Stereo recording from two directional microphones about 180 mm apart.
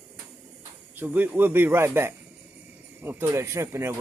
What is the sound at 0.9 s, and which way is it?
Speech, 10° right (ahead or behind).